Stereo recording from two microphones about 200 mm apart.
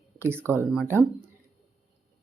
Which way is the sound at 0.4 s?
10° right (ahead or behind).